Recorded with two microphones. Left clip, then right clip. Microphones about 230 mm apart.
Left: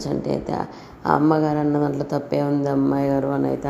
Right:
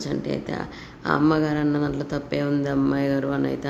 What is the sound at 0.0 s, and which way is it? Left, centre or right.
Speech, centre.